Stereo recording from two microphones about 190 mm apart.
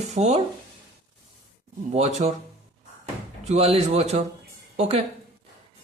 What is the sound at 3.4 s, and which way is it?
A man's voice, 35° right (ahead or behind).